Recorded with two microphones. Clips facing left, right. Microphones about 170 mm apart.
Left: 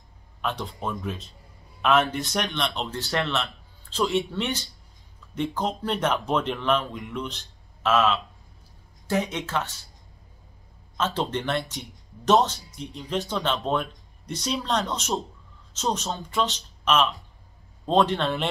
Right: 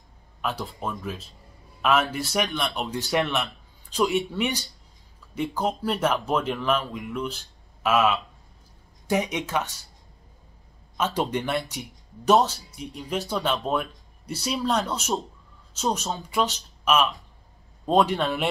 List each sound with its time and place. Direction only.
0.4 s speech: 5° right (ahead or behind)
11.0 s speech: 10° right (ahead or behind)